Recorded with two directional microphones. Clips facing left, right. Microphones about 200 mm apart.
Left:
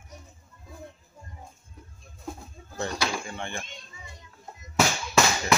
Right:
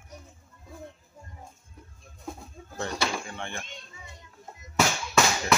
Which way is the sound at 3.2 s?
Centre (ahead or behind).